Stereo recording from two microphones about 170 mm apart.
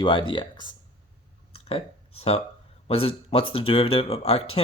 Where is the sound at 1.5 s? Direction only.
35° left (ahead or behind).